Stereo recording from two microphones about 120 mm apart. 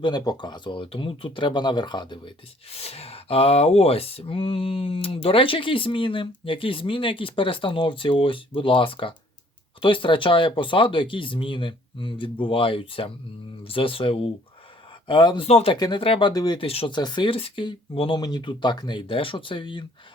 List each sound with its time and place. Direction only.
0.0 s speech: 35° left (ahead or behind)
2.6 s speech: 55° left (ahead or behind)
15.4 s speech: 60° left (ahead or behind)
15.7 s speech: 40° left (ahead or behind)
16.3 s speech: 30° left (ahead or behind)
16.6 s speech: 50° left (ahead or behind)
16.9 s speech: 40° left (ahead or behind)
18.2 s speech: 35° left (ahead or behind)